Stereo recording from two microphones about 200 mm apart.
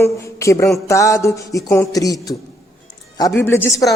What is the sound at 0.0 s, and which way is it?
Speech, 15° left (ahead or behind).